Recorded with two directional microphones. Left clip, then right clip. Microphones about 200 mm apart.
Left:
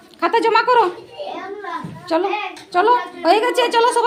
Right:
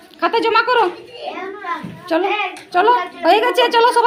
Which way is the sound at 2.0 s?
Centre (ahead or behind).